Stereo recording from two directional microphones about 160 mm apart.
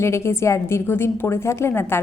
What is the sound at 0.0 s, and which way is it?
A woman's voice, 15° left (ahead or behind).